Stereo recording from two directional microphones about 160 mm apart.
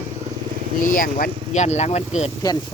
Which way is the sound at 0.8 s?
60° left (ahead or behind).